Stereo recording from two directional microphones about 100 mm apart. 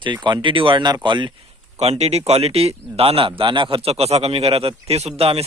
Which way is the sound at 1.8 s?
90° right.